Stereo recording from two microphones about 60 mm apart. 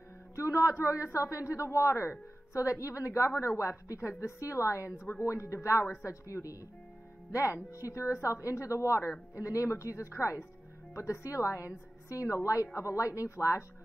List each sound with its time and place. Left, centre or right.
0.4 s a man's voice: left
7.7 s a man's voice: left